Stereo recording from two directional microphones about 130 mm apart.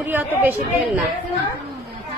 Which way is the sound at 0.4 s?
15° right (ahead or behind).